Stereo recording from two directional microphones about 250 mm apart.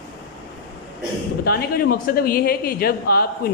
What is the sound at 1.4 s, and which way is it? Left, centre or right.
A man's voice, left.